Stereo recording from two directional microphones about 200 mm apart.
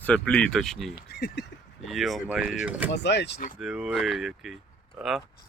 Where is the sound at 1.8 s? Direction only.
Centre (ahead or behind).